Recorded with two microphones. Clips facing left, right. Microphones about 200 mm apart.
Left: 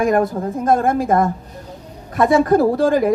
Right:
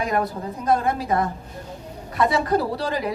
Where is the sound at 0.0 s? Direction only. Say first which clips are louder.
Left 8 dB; 50° left (ahead or behind).